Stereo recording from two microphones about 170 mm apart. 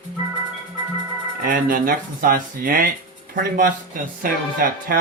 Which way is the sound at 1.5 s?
55° right (ahead or behind).